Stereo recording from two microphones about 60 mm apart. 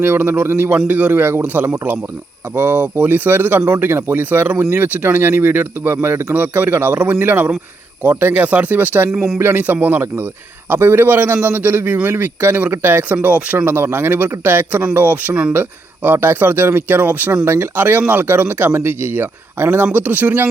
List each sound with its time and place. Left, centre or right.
0.0 s a man's voice: right
9.0 s speech: centre
9.4 s a man's voice: right
13.7 s a man's voice: right